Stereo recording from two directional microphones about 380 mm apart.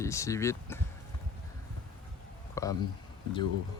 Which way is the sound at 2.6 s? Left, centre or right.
Centre.